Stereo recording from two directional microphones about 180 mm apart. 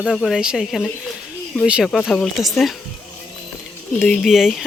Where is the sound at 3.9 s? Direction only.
5° left (ahead or behind).